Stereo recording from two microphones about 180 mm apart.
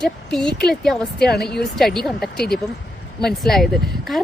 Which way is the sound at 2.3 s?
60° left (ahead or behind).